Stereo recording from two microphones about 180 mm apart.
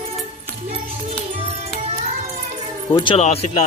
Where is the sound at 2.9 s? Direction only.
30° left (ahead or behind).